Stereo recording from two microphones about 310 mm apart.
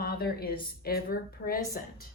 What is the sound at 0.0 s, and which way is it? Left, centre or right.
A woman's voice, left.